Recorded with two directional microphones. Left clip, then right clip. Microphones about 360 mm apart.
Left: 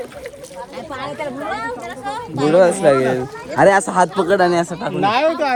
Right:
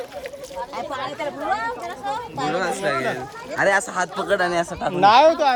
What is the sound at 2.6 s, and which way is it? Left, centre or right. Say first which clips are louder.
A child's voice: left 12 dB; centre.